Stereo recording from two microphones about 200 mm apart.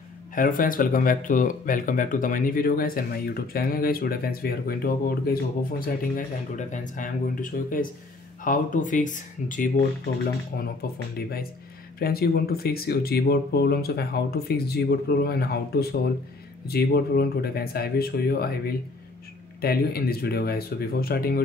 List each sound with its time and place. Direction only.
0.3 s speech: 45° left (ahead or behind)
10.6 s speech: 50° left (ahead or behind)